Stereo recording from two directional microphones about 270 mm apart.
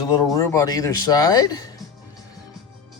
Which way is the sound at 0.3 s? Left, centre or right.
Centre.